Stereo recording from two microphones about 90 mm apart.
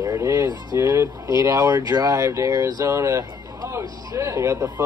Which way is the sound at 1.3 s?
40° right (ahead or behind).